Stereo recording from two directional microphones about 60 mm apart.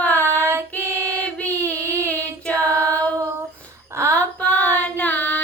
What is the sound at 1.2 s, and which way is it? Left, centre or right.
Child singing, left.